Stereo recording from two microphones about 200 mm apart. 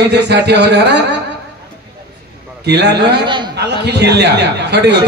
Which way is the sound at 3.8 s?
55° right (ahead or behind).